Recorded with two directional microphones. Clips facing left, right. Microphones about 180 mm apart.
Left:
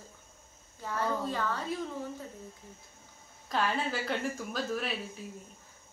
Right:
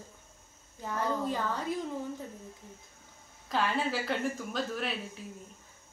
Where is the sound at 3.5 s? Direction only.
Centre (ahead or behind).